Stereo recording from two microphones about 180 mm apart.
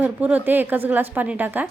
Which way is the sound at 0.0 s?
10° right (ahead or behind).